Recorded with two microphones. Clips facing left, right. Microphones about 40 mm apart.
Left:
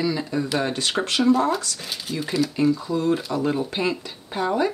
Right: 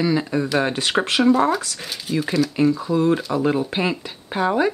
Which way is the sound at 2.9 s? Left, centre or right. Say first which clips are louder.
Right 4 dB; right.